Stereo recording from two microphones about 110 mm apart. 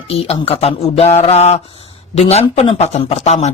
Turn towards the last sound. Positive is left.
turn(degrees=85)